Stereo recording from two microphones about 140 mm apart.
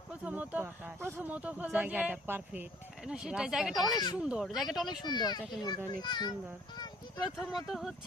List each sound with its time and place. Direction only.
0.1 s speech: 10° right (ahead or behind)
3.9 s a child's voice: 30° left (ahead or behind)
4.2 s speech: 5° right (ahead or behind)
5.0 s a child's voice: 30° left (ahead or behind)
7.5 s speech: centre (ahead or behind)